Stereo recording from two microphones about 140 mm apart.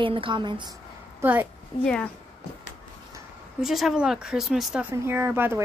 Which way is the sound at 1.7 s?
40° left (ahead or behind).